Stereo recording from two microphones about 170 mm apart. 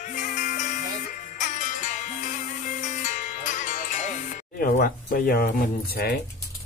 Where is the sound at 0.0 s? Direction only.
50° left (ahead or behind); by 6.1 s 65° left (ahead or behind).